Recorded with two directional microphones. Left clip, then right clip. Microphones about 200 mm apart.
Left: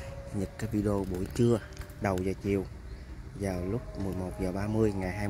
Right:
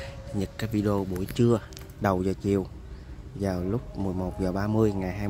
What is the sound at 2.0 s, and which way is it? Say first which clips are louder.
Speech: right 5 dB; 20° right (ahead or behind).